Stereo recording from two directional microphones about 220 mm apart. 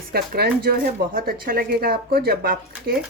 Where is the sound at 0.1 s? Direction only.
45° right (ahead or behind).